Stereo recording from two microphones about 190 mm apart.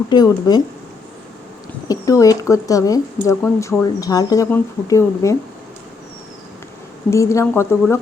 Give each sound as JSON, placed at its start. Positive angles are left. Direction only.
{"t": 0.1, "sound": "speech", "side_deg": 20}
{"t": 1.9, "sound": "speech", "side_deg": 15}
{"t": 7.1, "sound": "speech", "side_deg": 15}